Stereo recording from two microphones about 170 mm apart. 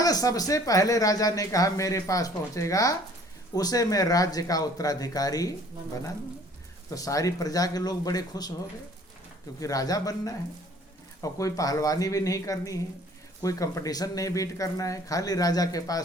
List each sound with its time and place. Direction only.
0.0 s speech: 20° left (ahead or behind)
6.9 s speech: 20° left (ahead or behind)
9.6 s speech: 20° left (ahead or behind)